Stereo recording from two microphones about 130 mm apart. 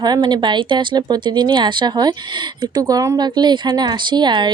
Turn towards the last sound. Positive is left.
turn(degrees=-35)  # may be behind; listen again after turning